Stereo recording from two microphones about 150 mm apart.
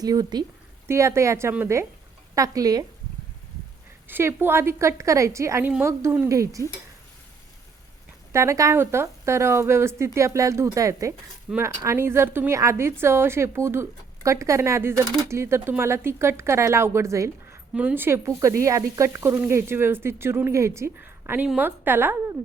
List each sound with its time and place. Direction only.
0.0 s speech: 25° right (ahead or behind)
4.1 s speech: 15° right (ahead or behind)
8.3 s speech: 20° right (ahead or behind)